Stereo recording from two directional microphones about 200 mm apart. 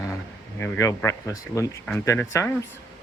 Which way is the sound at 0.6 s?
15° left (ahead or behind).